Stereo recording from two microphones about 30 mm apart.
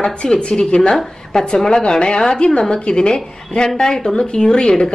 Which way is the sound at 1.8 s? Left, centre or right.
Left.